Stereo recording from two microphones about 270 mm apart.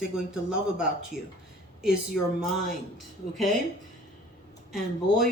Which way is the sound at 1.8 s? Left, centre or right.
Centre.